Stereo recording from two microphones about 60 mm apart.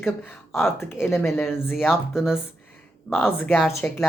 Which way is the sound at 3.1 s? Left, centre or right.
Left.